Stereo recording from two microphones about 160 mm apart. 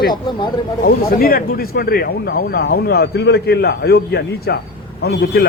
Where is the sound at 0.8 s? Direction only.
70° left (ahead or behind).